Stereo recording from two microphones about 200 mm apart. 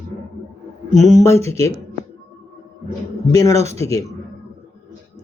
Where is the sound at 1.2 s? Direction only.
15° left (ahead or behind).